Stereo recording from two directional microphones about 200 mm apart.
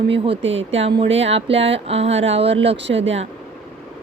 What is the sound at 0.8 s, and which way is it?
Speech, 25° right (ahead or behind).